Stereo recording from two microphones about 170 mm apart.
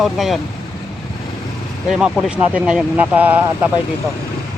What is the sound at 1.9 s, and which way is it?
Speech, 5° right (ahead or behind).